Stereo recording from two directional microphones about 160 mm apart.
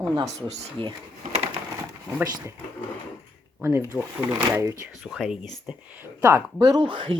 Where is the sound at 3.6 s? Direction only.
15° right (ahead or behind).